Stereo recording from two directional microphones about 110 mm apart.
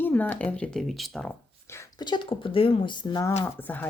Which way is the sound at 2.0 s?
45° left (ahead or behind).